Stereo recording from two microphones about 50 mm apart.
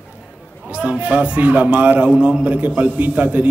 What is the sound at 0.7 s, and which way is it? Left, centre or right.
A man's voice, right.